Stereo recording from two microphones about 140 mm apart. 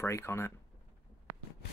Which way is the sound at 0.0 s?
20° left (ahead or behind).